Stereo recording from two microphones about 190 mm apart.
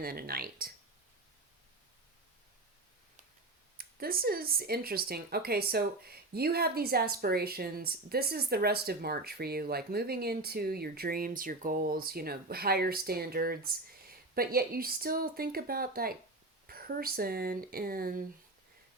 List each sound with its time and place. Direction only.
0.0 s speech: 50° right (ahead or behind)
3.8 s speech: 50° right (ahead or behind)